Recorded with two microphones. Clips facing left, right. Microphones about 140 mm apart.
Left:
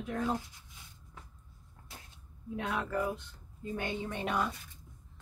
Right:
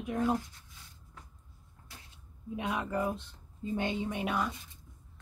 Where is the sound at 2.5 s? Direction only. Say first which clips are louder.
Right 1 dB; 15° right (ahead or behind).